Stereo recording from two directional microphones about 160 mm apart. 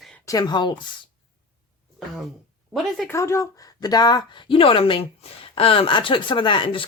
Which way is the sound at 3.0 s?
20° left (ahead or behind).